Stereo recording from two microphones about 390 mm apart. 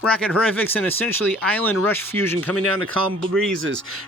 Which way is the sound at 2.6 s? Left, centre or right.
Right.